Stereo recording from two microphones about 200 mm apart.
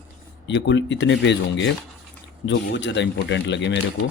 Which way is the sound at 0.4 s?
60° left (ahead or behind).